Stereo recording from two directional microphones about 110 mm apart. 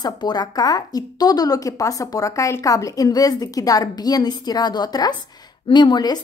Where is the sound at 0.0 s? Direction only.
40° left (ahead or behind).